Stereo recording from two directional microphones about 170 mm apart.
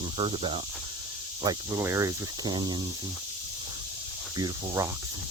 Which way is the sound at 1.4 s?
20° right (ahead or behind).